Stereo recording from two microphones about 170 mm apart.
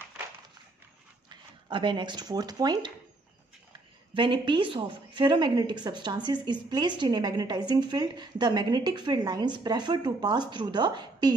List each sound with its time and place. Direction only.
1.3 s speech: 30° right (ahead or behind)
4.1 s a woman's voice: 30° right (ahead or behind)